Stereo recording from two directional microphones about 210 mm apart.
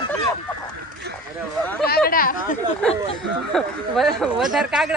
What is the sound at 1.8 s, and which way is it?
Speech, 45° left (ahead or behind).